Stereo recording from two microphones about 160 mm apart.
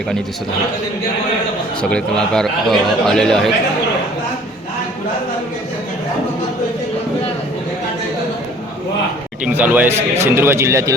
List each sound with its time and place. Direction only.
1.8 s a man's voice: 5° left (ahead or behind)
9.4 s speech: 10° right (ahead or behind)